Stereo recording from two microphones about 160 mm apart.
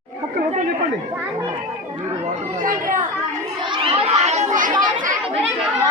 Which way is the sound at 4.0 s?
40° right (ahead or behind).